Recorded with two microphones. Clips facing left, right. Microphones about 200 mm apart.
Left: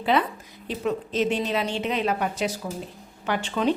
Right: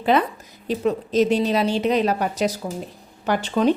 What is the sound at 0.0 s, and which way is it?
A woman's voice, 45° right (ahead or behind).